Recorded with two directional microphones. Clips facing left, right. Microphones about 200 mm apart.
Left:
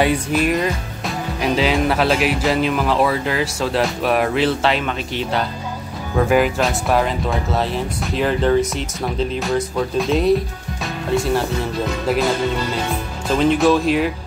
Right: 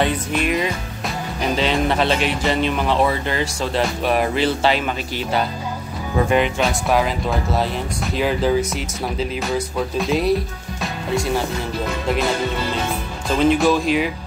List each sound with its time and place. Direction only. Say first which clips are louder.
0.0 s music: left 3 dB; centre (ahead or behind)
13.3 s music: left 1 dB; centre (ahead or behind)